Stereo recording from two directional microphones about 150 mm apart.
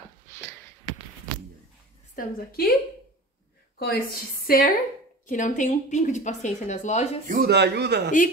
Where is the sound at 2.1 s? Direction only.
80° left.